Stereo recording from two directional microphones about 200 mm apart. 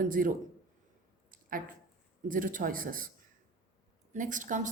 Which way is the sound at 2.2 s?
40° right (ahead or behind).